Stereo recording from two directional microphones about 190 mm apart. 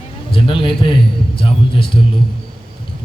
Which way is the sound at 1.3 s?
30° left (ahead or behind).